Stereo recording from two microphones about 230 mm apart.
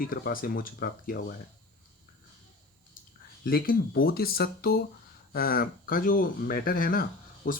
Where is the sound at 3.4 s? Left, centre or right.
Left.